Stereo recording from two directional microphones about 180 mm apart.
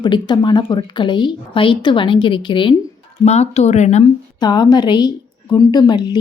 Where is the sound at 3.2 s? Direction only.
35° left (ahead or behind).